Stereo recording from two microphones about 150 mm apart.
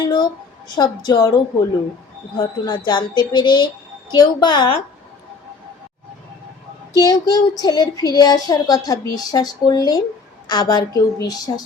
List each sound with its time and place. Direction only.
0.0 s a sound: 30° left (ahead or behind)
0.8 s speech: 30° left (ahead or behind)
2.6 s speech: 30° left (ahead or behind)
6.9 s speech: 25° left (ahead or behind)